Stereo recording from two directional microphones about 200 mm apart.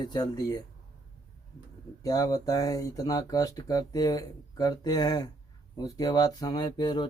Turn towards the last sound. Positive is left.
turn(degrees=20)  # may be behind; listen again after turning